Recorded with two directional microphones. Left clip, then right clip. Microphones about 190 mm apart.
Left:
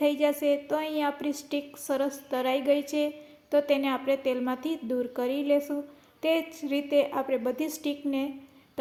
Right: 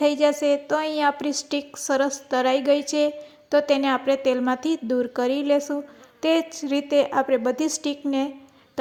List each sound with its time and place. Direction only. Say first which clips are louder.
0.0 s a woman's voice: right 5 dB; 25° right (ahead or behind)